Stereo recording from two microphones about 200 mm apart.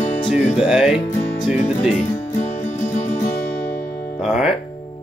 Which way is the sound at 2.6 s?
40° left (ahead or behind).